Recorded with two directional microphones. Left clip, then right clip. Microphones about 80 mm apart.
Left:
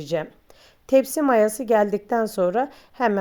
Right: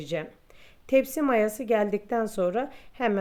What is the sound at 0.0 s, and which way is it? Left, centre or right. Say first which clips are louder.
Speech: left 6 dB; left.